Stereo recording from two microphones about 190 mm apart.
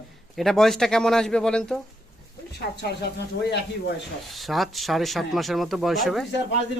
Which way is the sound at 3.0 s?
60° left (ahead or behind).